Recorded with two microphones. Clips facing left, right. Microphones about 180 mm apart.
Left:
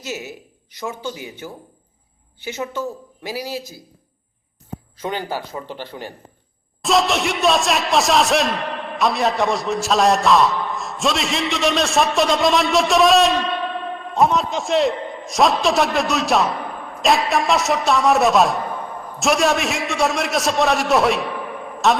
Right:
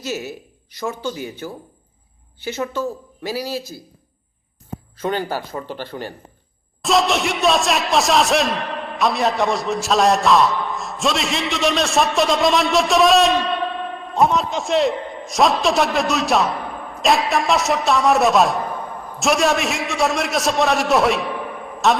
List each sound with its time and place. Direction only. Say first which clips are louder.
0.0 s speech: right 3 dB; 15° left (ahead or behind)
4.9 s speech: right 3 dB; 15° left (ahead or behind)
6.8 s a man's voice: even; centre (ahead or behind)